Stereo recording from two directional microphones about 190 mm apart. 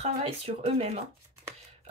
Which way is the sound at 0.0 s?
35° right (ahead or behind).